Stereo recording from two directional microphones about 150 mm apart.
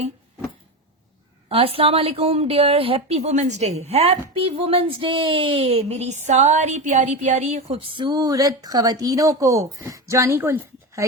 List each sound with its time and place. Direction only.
1.5 s a woman's voice: 40° right (ahead or behind); by 11.0 s 15° right (ahead or behind)